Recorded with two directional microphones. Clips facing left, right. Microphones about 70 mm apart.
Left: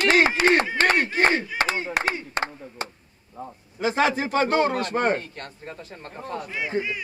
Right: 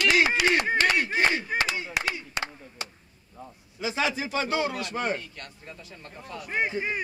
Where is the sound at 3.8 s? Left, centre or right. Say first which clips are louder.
Left 6 dB; left.